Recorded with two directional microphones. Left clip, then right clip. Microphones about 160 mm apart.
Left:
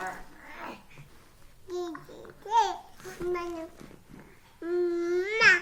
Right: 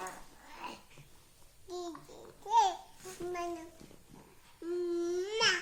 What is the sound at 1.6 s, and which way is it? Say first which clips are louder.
Babbling: left 7 dB; 10° right (ahead or behind).